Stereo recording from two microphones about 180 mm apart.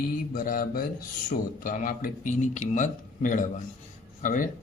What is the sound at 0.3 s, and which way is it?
A man's voice, 50° left (ahead or behind).